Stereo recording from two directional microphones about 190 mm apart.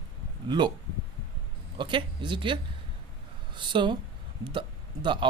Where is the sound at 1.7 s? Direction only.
25° right (ahead or behind).